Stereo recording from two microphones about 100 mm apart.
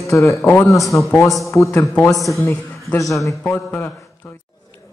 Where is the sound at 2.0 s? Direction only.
Centre (ahead or behind).